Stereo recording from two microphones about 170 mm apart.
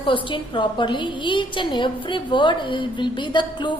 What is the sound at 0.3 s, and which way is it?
A woman's voice, 30° left (ahead or behind).